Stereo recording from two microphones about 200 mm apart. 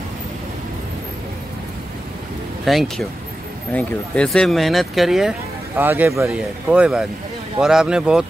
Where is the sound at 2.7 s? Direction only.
Centre (ahead or behind).